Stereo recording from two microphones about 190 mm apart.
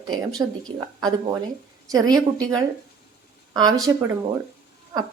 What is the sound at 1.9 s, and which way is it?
Speech, 20° right (ahead or behind).